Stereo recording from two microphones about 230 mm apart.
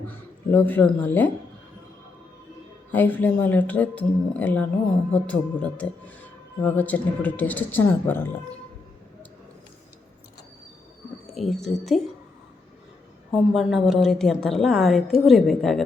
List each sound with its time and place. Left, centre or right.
0.0 s speech: centre
2.9 s a woman's voice: centre
11.3 s a woman's voice: centre
13.3 s a woman's voice: centre